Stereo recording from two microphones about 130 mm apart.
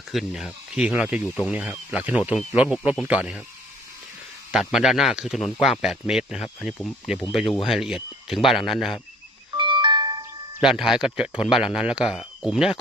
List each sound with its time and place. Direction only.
0.1 s speech: centre (ahead or behind)
4.5 s speech: 5° right (ahead or behind)
9.6 s music: 40° right (ahead or behind)
10.6 s speech: 5° right (ahead or behind)